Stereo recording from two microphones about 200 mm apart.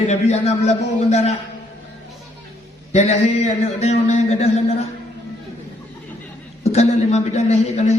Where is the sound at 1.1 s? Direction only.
35° left (ahead or behind).